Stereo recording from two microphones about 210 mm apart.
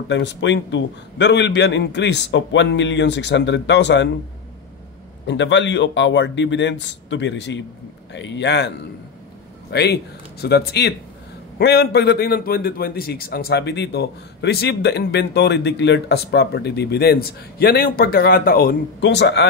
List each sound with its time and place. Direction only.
0.1 s a man's voice: 55° left (ahead or behind)
5.2 s a man's voice: 60° left (ahead or behind)